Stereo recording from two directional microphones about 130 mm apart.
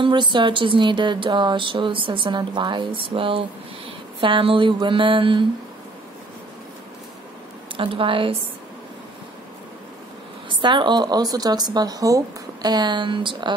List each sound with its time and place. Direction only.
0.0 s speech: 35° right (ahead or behind)
7.7 s speech: 40° right (ahead or behind)
10.5 s speech: 40° right (ahead or behind)